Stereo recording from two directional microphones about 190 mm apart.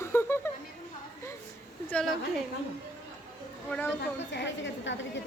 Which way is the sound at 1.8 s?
5° left (ahead or behind).